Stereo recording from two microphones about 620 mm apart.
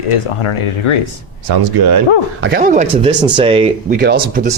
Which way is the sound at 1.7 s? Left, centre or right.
Right.